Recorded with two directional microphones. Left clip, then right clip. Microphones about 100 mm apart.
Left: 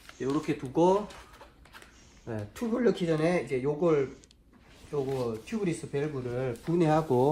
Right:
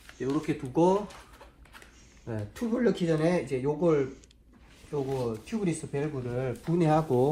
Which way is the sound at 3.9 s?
15° left (ahead or behind).